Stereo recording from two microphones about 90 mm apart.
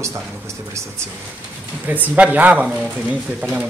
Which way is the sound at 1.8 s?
20° right (ahead or behind).